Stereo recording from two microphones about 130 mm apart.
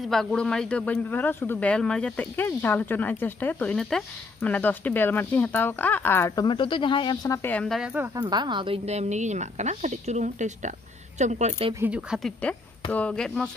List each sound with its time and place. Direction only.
0.0 s speech: 5° left (ahead or behind)
6.3 s speech: 35° left (ahead or behind)
7.4 s speech: 10° left (ahead or behind)
8.2 s a woman's voice: 35° right (ahead or behind); by 11.5 s 65° right (ahead or behind)
11.8 s speech: 10° right (ahead or behind)
12.2 s speech: 5° left (ahead or behind)